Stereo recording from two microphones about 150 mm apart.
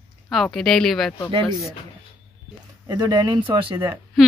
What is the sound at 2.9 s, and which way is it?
Speech, 30° right (ahead or behind).